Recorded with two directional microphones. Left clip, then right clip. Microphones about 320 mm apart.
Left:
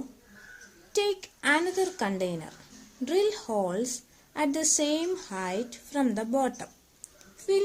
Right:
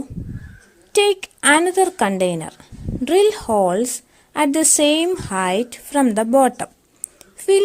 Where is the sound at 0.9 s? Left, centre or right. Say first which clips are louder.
Right 12 dB; right.